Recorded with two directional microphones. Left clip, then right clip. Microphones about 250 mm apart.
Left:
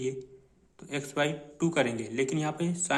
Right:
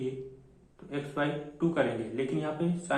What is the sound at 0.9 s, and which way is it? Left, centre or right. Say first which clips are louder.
Speech: left 2 dB; left.